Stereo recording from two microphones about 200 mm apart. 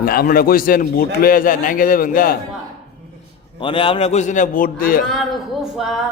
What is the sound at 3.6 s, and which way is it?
A man's voice, 25° left (ahead or behind).